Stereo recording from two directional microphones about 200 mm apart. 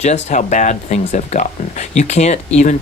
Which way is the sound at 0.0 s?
35° left (ahead or behind).